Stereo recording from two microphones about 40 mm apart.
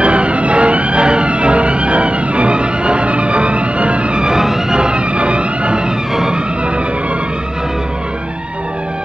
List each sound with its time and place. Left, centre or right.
0.0 s music: right
6.1 s music: centre